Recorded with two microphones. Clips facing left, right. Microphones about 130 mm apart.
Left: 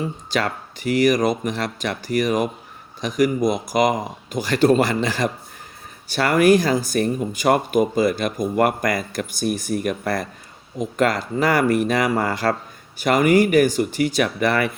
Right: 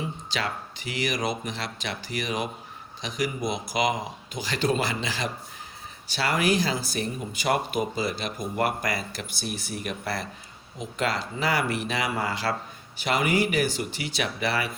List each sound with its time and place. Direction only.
0.0 s speech: 45° left (ahead or behind)